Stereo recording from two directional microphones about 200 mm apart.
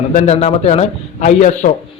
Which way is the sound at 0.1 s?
30° left (ahead or behind).